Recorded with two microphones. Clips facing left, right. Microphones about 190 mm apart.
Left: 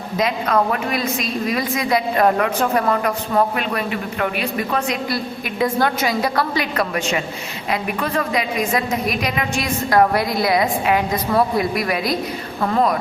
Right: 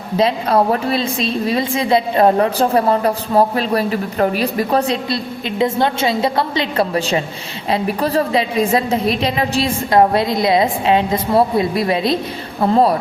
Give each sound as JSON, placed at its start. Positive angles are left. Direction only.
{"t": 0.2, "sound": "a woman's voice", "side_deg": -30}